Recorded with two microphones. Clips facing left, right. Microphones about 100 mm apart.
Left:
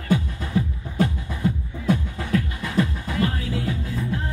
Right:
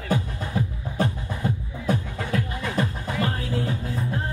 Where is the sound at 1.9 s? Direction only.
35° right (ahead or behind).